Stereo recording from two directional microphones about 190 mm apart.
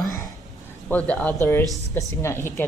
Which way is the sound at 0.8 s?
5° left (ahead or behind).